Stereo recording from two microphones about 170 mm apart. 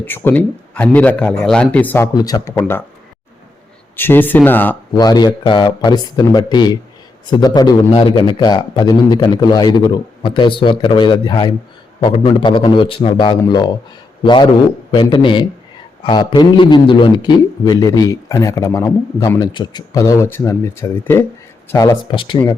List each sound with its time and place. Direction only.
0.0 s a man's voice: 10° left (ahead or behind)
2.1 s a man's voice: 20° left (ahead or behind)
3.9 s a man's voice: 10° left (ahead or behind)
4.9 s a man's voice: 25° left (ahead or behind)
14.9 s a man's voice: 25° left (ahead or behind)
22.1 s a man's voice: 30° left (ahead or behind)